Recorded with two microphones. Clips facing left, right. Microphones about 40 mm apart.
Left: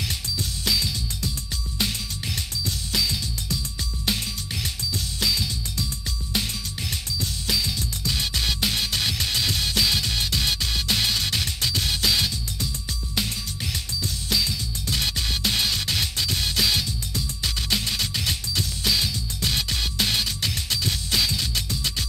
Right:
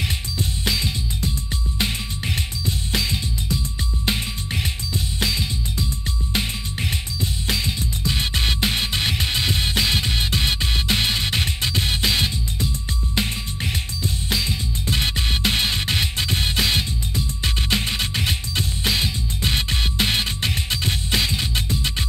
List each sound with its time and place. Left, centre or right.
0.4 s music: right
4.9 s music: right